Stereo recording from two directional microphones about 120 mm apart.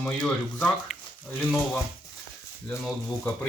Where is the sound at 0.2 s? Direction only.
Centre (ahead or behind).